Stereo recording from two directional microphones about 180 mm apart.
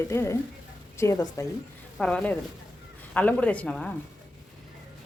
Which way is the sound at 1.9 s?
5° left (ahead or behind).